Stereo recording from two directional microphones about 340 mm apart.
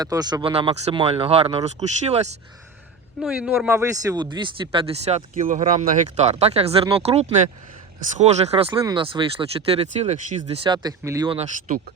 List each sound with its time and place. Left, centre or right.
0.0 s speech: centre
3.2 s speech: centre